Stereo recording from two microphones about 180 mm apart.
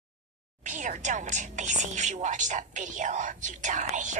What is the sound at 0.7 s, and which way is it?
Speech, 45° right (ahead or behind).